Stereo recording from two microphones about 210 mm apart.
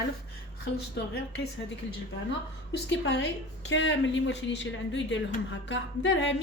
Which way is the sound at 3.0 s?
55° left (ahead or behind).